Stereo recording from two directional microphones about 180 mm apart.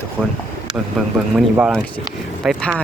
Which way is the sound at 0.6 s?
5° right (ahead or behind).